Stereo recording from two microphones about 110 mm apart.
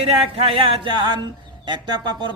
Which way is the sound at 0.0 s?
60° right (ahead or behind).